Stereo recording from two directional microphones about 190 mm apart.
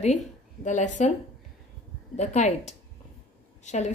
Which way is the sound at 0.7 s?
40° left (ahead or behind).